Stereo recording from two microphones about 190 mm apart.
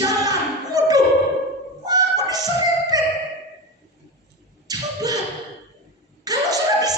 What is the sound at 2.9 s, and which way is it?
Music, 20° right (ahead or behind).